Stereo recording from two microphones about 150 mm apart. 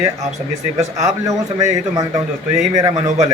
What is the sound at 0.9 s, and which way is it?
A man's voice, 20° right (ahead or behind).